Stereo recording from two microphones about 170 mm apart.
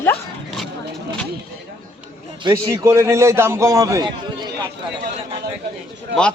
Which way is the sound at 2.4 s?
20° right (ahead or behind).